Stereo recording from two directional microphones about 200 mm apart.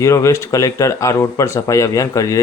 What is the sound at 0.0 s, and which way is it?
A man's voice, 15° left (ahead or behind).